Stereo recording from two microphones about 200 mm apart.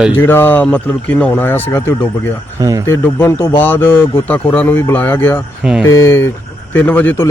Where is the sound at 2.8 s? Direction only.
15° left (ahead or behind).